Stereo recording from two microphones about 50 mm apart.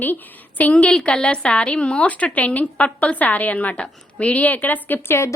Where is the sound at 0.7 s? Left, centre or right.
Left.